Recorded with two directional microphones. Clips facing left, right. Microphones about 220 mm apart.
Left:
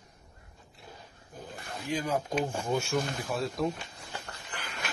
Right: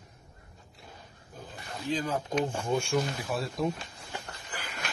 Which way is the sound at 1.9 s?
10° left (ahead or behind).